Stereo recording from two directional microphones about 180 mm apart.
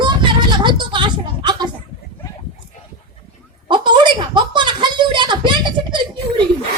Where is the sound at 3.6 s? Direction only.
25° right (ahead or behind).